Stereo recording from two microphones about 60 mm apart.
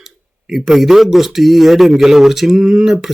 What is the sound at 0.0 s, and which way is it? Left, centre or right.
Speech, centre.